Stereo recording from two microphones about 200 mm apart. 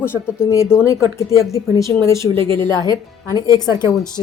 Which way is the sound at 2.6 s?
20° right (ahead or behind).